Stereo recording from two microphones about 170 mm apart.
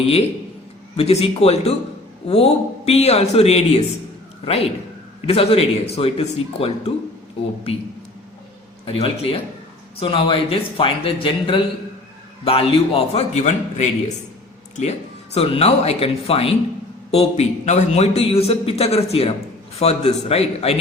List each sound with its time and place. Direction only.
0.9 s a man's voice: 35° left (ahead or behind)
8.9 s a man's voice: 35° left (ahead or behind)